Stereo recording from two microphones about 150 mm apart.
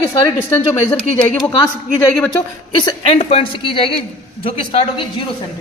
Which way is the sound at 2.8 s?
35° left (ahead or behind).